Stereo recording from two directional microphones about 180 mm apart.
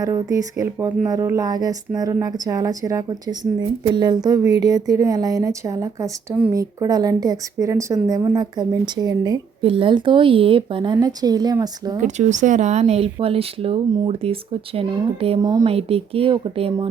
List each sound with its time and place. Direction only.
0.0 s a woman's voice: 20° right (ahead or behind)
11.9 s speech: 40° right (ahead or behind)
15.4 s a woman's voice: 20° right (ahead or behind)
15.6 s speech: 35° right (ahead or behind)